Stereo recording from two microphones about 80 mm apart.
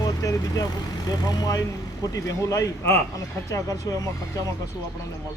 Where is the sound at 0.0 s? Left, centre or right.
Left.